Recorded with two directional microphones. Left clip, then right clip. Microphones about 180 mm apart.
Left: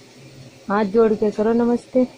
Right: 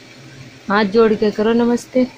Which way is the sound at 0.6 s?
5° right (ahead or behind).